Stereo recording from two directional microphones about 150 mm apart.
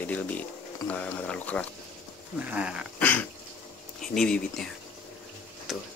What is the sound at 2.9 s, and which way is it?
Dog, 10° left (ahead or behind).